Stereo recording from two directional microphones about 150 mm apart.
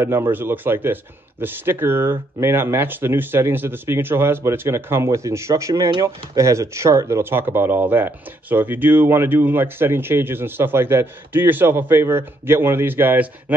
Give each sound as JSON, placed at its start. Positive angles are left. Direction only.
{"t": 0.0, "sound": "speech", "side_deg": -15}